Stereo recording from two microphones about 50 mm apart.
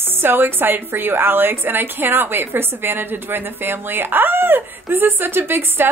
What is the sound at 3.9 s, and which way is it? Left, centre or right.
A woman's voice, right.